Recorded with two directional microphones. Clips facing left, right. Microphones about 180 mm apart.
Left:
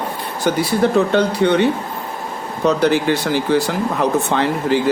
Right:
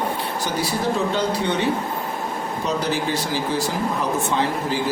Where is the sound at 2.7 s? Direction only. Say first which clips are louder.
Left 9 dB; 65° left (ahead or behind).